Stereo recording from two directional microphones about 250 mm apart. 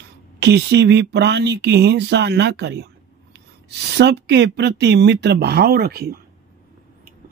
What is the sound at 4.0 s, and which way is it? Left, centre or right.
Speech, right.